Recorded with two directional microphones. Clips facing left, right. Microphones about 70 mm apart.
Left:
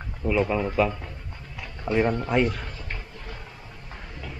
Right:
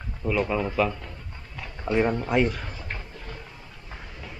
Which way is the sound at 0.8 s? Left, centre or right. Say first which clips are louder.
Left 2 dB; centre.